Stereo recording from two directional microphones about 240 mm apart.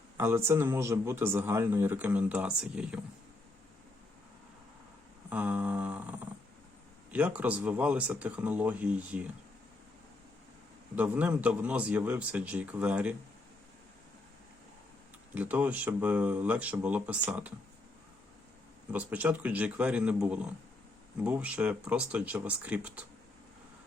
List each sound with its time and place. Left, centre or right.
0.2 s a man's voice: centre
5.3 s a sound: centre
7.1 s speech: centre
10.9 s speech: centre
15.4 s a man's voice: centre
18.9 s speech: centre